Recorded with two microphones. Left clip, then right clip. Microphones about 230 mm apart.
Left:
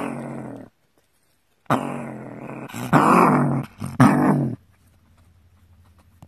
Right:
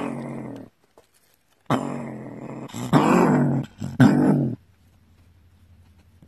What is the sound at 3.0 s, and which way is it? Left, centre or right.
Dog, left.